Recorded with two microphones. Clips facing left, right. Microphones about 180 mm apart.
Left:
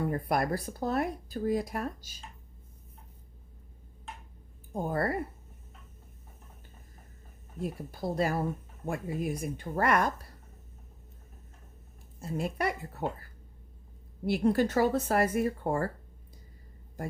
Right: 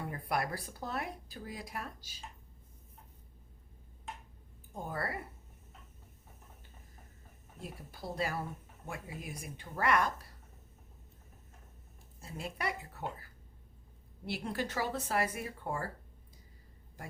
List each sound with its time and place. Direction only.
0.1 s speech: 45° left (ahead or behind)
4.7 s speech: 45° left (ahead or behind)
7.6 s speech: 45° left (ahead or behind)
12.2 s speech: 50° left (ahead or behind)
14.3 s speech: 45° left (ahead or behind)